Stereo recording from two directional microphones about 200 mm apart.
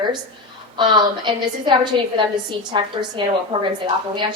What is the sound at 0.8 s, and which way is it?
Speech, 25° right (ahead or behind).